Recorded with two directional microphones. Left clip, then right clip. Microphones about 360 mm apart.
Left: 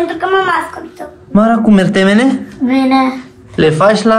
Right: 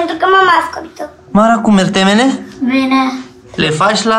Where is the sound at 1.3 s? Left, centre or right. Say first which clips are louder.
Right 1 dB; centre.